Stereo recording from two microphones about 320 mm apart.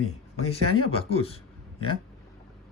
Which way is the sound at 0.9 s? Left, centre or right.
Centre.